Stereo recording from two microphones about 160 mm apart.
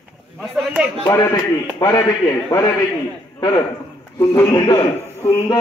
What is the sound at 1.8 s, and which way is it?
Speech, 20° left (ahead or behind).